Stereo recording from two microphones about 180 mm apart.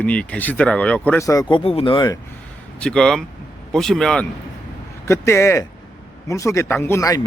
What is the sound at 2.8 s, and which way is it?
A man's voice, 5° left (ahead or behind).